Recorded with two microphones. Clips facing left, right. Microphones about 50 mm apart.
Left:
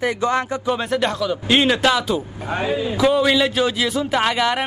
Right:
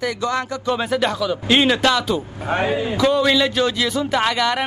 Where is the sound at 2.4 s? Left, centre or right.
Right.